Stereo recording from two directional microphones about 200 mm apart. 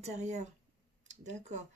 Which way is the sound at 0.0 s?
35° right (ahead or behind).